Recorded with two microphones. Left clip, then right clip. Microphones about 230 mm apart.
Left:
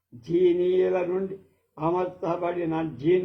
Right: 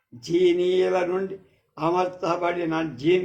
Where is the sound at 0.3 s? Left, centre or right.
Right.